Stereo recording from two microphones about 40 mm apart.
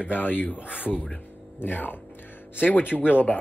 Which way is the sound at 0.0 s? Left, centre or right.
Left.